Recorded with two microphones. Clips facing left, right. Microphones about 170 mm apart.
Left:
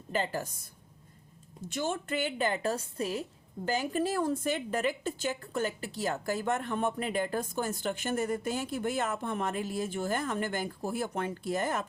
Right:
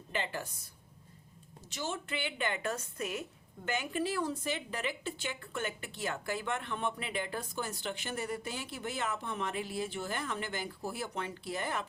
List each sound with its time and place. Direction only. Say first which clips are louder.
0.1 s a woman's voice: left 5 dB; 40° left (ahead or behind)
1.6 s a woman's voice: left 6 dB; 50° left (ahead or behind)